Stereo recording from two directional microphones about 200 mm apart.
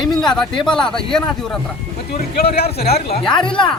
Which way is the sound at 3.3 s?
25° left (ahead or behind).